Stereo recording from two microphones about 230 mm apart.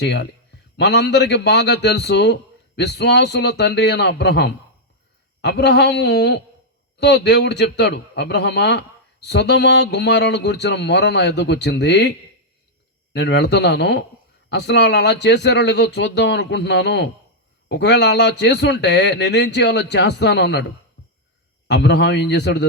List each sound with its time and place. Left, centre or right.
0.0 s a man's voice: left
13.1 s a man's voice: left